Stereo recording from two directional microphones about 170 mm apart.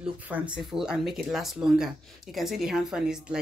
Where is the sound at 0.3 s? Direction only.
5° right (ahead or behind).